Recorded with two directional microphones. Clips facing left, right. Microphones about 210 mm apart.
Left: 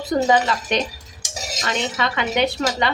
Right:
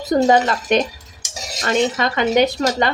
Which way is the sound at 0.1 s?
45° right (ahead or behind).